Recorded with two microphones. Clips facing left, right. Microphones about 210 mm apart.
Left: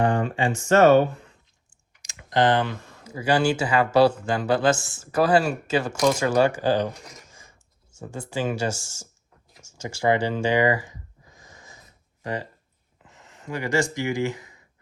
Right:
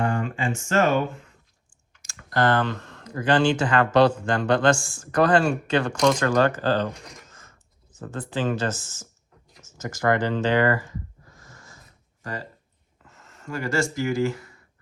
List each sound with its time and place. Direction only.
0.0 s speech: 35° left (ahead or behind)
1.9 s speech: 15° left (ahead or behind)
13.1 s a sound: 15° left (ahead or behind)
14.1 s speech: 15° left (ahead or behind)